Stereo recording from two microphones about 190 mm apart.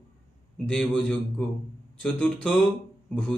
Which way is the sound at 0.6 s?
5° left (ahead or behind).